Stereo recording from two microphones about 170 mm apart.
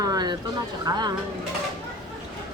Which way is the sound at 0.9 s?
25° right (ahead or behind).